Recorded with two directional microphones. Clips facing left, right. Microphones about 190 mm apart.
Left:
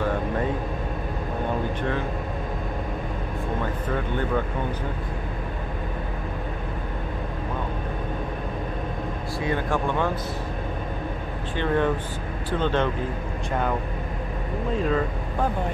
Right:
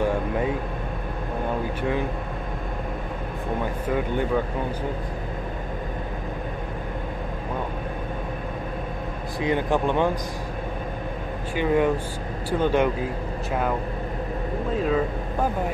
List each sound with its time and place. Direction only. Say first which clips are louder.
1.8 s speech: right 2 dB; 15° right (ahead or behind)
9.4 s speech: right 3 dB; 20° right (ahead or behind)
11.5 s speech: right 2 dB; 10° right (ahead or behind)
14.8 s speech: right 1 dB; 5° right (ahead or behind)